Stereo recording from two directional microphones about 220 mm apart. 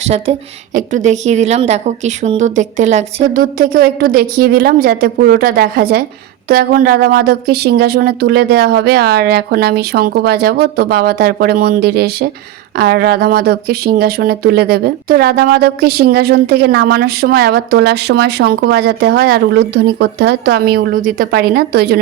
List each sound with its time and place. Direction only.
0.0 s speech: 30° right (ahead or behind); by 22.0 s 45° right (ahead or behind)